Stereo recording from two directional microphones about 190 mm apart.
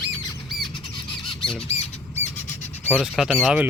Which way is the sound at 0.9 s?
25° left (ahead or behind).